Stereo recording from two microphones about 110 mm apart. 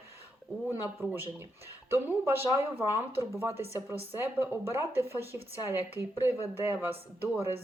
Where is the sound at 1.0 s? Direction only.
15° right (ahead or behind).